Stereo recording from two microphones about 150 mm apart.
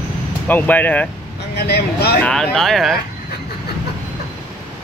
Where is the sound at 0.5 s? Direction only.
10° left (ahead or behind).